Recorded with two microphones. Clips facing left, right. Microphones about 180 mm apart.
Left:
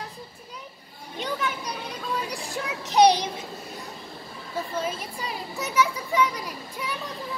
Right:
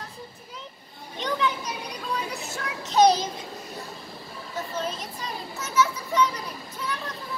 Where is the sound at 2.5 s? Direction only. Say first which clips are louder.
Left 1 dB; 15° left (ahead or behind).